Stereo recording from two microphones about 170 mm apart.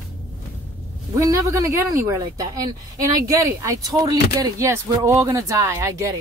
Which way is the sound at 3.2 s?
20° right (ahead or behind).